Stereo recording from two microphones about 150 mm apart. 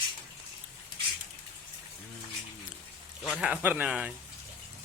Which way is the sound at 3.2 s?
5° right (ahead or behind).